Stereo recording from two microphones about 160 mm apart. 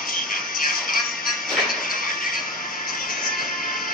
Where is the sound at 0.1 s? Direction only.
60° left (ahead or behind).